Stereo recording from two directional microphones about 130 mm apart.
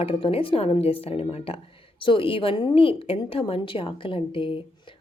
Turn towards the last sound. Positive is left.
turn(degrees=40)  # may be behind; listen again after turning